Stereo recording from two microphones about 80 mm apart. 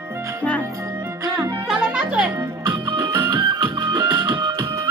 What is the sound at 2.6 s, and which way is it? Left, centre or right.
Music, right.